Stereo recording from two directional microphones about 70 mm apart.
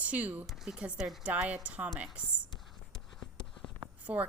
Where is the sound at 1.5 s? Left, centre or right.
Centre.